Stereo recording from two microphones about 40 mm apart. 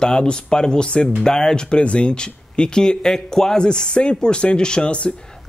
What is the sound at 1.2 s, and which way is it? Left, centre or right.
Speech, centre.